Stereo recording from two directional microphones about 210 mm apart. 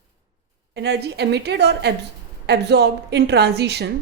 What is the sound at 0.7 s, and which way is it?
A woman's voice, 55° right (ahead or behind).